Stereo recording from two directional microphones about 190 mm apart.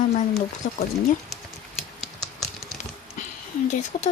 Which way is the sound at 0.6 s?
55° left (ahead or behind).